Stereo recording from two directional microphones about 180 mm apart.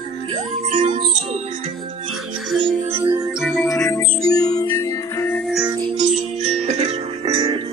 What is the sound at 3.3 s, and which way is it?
Music, centre (ahead or behind).